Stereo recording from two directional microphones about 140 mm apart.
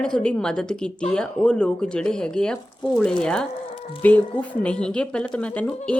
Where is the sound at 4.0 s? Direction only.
10° left (ahead or behind).